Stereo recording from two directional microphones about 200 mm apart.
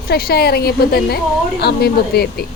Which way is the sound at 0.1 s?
50° left (ahead or behind).